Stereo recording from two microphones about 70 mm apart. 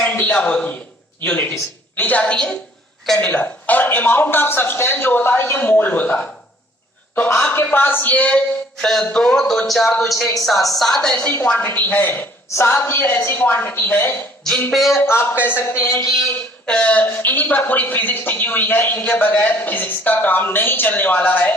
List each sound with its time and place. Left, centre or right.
0.0 s a sound: left
0.3 s a woman's voice: centre
11.2 s speech: left
12.5 s speech: left
14.7 s a woman's voice: centre
14.9 s speech: left
15.7 s speech: left
16.6 s speech: centre